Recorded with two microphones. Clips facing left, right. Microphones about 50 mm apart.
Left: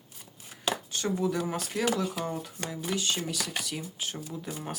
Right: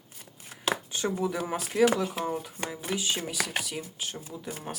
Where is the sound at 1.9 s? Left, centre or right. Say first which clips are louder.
Right 2 dB; right.